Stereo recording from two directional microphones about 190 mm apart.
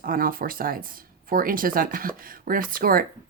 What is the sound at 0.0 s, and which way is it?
Speech, 50° right (ahead or behind).